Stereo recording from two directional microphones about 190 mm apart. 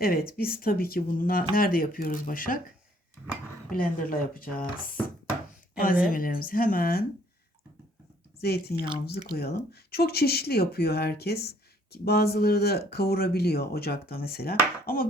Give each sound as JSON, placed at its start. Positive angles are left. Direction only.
{"t": 0.0, "sound": "speech", "side_deg": 50}
{"t": 3.7, "sound": "speech", "side_deg": 50}
{"t": 6.1, "sound": "speech", "side_deg": 50}
{"t": 8.4, "sound": "speech", "side_deg": 55}